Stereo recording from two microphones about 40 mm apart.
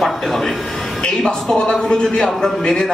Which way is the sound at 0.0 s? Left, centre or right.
Centre.